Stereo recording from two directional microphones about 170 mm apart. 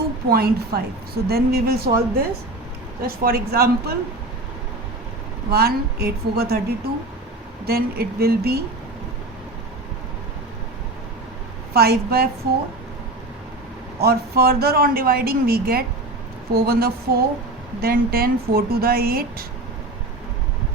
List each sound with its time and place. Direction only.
0.3 s speech: 65° right (ahead or behind)
3.0 s speech: 60° right (ahead or behind)
5.5 s a woman's voice: 70° right (ahead or behind)
11.7 s speech: 65° right (ahead or behind)
14.0 s speech: 65° right (ahead or behind)